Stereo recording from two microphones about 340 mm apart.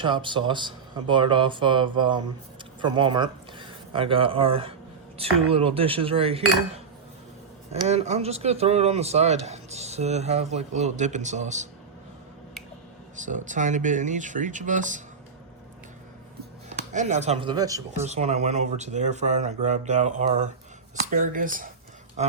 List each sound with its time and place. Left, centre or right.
0.0 s speech: centre
13.2 s speech: right
16.9 s speech: right